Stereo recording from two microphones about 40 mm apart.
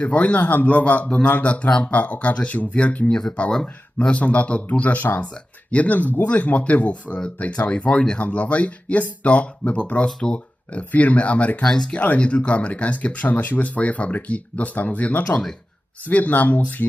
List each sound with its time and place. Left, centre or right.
0.0 s speech: left
3.1 s speech: centre
4.0 s speech: left
9.3 s speech: left
11.6 s speech: centre
11.9 s speech: left
13.3 s speech: left
13.7 s speech: left